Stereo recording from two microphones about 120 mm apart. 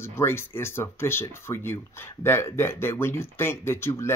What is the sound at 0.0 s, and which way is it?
Speech, 20° left (ahead or behind).